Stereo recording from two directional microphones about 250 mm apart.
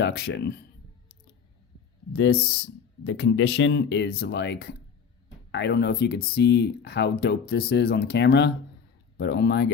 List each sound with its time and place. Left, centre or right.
0.0 s speech: left
2.1 s speech: left